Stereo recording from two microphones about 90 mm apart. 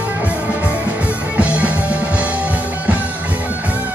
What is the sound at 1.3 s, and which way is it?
Music, 15° right (ahead or behind).